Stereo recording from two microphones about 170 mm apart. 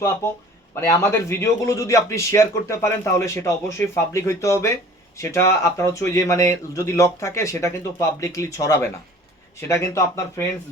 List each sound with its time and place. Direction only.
0.2 s a man's voice: 15° left (ahead or behind)